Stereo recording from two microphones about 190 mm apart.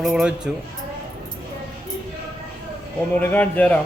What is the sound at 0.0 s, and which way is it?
Speech, 5° right (ahead or behind).